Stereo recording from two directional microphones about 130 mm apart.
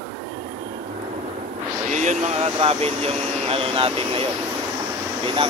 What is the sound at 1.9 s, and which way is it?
Speech, 65° right (ahead or behind).